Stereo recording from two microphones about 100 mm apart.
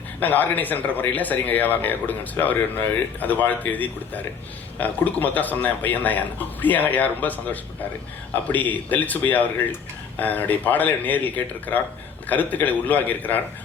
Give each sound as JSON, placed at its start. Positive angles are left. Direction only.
{"t": 0.2, "sound": "a man's voice", "side_deg": 15}